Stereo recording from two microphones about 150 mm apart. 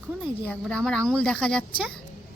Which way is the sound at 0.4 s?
5° left (ahead or behind).